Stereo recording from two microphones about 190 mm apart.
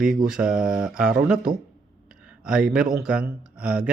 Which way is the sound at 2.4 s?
5° right (ahead or behind).